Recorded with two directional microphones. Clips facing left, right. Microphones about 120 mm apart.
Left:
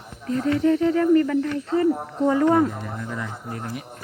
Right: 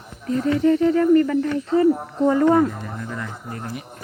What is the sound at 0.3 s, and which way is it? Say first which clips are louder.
Speech: right 2 dB; 5° right (ahead or behind).